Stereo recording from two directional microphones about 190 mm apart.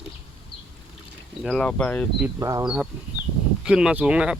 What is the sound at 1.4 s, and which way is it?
Speech, centre (ahead or behind).